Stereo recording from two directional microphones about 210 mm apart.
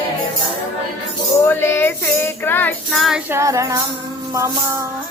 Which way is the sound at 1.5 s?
10° left (ahead or behind).